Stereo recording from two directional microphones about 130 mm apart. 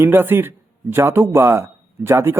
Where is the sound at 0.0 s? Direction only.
15° right (ahead or behind).